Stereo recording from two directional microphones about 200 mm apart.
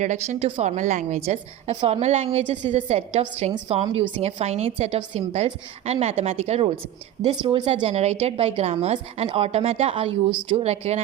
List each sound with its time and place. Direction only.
0.0 s a woman's voice: 35° right (ahead or behind)